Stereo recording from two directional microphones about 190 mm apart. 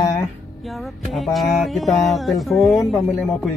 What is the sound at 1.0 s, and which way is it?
Speech, centre (ahead or behind).